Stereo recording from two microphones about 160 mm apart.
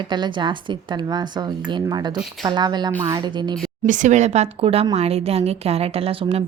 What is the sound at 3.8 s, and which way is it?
A woman's voice, 50° right (ahead or behind).